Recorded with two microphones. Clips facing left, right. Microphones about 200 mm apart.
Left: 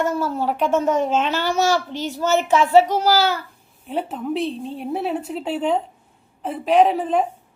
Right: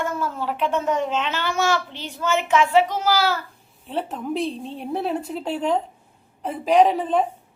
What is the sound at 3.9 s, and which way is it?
A woman's voice, 5° left (ahead or behind).